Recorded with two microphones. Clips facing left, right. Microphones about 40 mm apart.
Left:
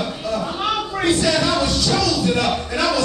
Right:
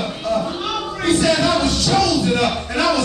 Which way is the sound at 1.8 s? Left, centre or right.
Centre.